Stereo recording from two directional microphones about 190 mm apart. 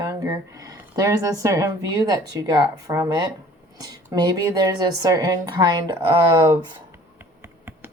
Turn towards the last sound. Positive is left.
turn(degrees=-10)  # may be behind; listen again after turning